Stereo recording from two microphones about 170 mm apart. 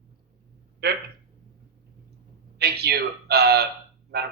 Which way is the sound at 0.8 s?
70° right (ahead or behind).